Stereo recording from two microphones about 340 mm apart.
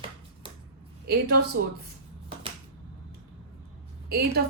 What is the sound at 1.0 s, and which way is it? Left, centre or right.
Speech, right.